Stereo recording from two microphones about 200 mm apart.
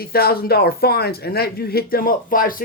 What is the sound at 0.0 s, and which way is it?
A man's voice, 50° left (ahead or behind).